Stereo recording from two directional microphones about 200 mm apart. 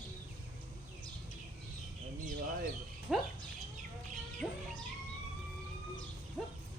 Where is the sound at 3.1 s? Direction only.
Centre (ahead or behind).